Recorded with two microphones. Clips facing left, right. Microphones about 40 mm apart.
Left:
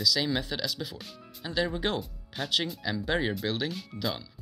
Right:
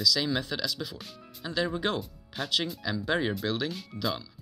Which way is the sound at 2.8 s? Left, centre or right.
Left.